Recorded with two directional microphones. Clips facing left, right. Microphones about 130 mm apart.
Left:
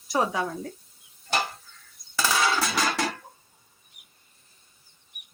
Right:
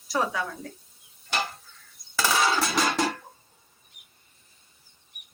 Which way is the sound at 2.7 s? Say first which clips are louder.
Right 2 dB; 25° right (ahead or behind).